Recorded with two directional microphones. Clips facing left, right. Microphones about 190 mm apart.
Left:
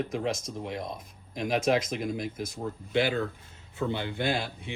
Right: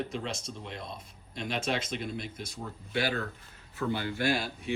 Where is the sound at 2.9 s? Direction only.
20° left (ahead or behind).